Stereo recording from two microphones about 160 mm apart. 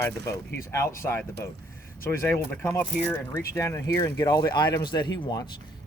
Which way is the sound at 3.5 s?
20° left (ahead or behind).